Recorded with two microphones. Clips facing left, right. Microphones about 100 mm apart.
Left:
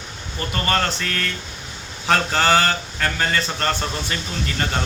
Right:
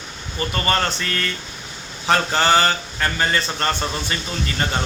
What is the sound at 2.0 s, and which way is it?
Speech, centre (ahead or behind).